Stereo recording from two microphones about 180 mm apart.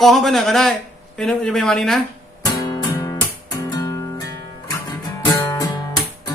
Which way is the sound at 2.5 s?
20° left (ahead or behind).